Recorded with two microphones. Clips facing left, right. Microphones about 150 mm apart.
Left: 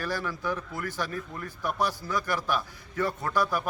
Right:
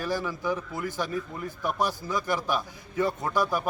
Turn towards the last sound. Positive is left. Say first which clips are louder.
# right 1 dB
turn(degrees=-15)  # may be behind; listen again after turning